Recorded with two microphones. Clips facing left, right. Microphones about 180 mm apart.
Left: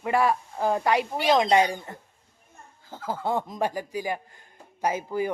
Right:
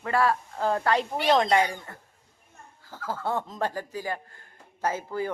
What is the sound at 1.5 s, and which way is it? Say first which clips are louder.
A man's voice: left 2 dB; 20° left (ahead or behind).